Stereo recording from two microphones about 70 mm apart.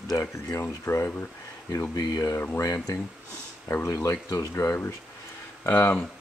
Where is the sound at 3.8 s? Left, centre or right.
Left.